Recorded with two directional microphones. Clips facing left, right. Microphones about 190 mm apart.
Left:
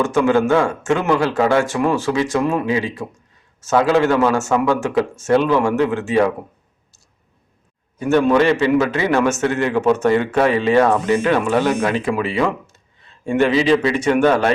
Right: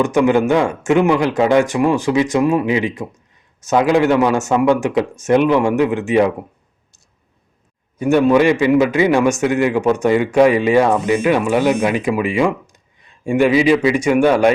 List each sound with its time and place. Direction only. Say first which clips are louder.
0.0 s a man's voice: right 2 dB; 15° right (ahead or behind)
7.9 s a man's voice: right 2 dB; 15° right (ahead or behind)